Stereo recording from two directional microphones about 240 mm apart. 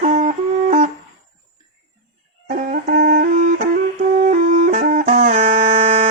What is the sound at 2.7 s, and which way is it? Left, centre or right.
Music, right.